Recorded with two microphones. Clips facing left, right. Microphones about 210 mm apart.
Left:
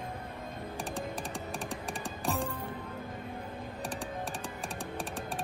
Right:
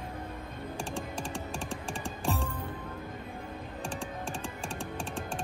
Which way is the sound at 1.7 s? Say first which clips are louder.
Right 1 dB; 15° left (ahead or behind).